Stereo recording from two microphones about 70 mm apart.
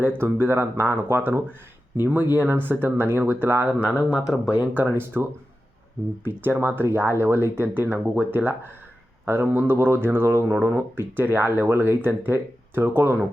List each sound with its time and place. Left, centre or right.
0.0 s speech: right
4.1 s speech: centre
4.5 s speech: right
6.2 s speech: right